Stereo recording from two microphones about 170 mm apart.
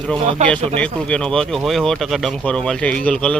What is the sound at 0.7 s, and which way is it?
Speech, 5° left (ahead or behind).